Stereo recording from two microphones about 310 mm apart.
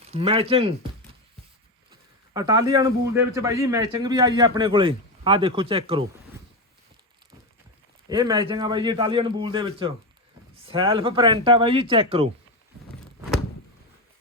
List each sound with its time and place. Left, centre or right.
0.1 s speech: centre
2.3 s a man's voice: centre
8.1 s a man's voice: centre